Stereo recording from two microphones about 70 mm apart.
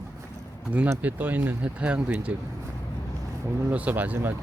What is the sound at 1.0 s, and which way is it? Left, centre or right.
Speech, right.